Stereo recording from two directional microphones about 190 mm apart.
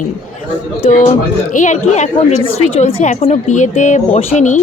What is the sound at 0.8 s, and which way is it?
A woman's voice, 35° left (ahead or behind).